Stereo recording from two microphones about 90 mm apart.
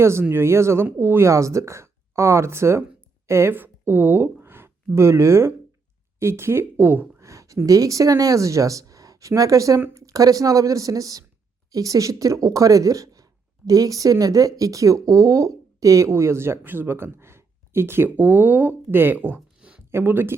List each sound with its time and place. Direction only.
0.0 s speech: 30° right (ahead or behind)
7.2 s speech: 35° right (ahead or behind)